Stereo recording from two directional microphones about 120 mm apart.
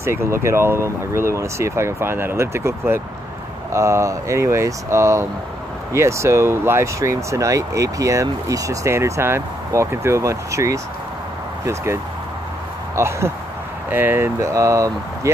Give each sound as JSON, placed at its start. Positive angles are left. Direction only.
{"t": 0.0, "sound": "speech", "side_deg": -20}